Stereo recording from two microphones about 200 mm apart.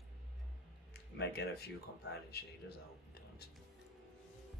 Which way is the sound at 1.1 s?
55° left (ahead or behind).